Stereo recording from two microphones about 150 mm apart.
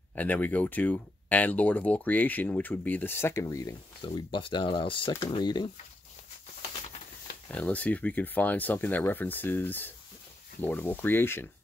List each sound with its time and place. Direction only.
0.1 s speech: 10° left (ahead or behind)
4.0 s speech: 35° left (ahead or behind)
7.4 s speech: 10° left (ahead or behind)